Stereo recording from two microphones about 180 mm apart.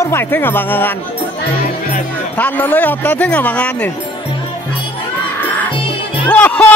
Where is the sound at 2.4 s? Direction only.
10° left (ahead or behind).